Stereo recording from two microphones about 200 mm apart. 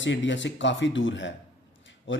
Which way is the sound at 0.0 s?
65° left (ahead or behind).